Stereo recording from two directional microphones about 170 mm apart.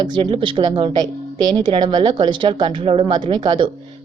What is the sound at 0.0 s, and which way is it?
A woman's voice, 30° right (ahead or behind).